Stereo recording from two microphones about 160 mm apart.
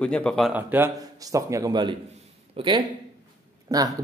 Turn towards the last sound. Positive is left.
turn(degrees=-20)  # may be behind; listen again after turning